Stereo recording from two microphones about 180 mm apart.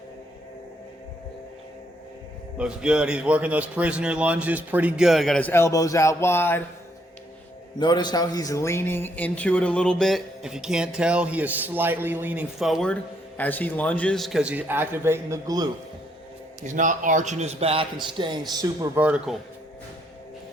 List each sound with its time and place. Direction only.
2.6 s a man's voice: 5° right (ahead or behind); by 6.6 s 15° left (ahead or behind)
7.8 s a man's voice: 25° left (ahead or behind); by 15.6 s 20° right (ahead or behind)
16.6 s a man's voice: 45° right (ahead or behind); by 18.9 s 20° right (ahead or behind)
18.9 s speech: 5° right (ahead or behind)